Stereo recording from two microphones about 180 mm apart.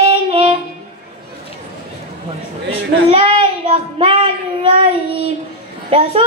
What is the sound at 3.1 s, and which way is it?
A child's voice, 30° right (ahead or behind).